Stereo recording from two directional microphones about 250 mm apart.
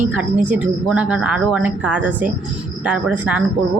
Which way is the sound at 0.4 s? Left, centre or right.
Centre.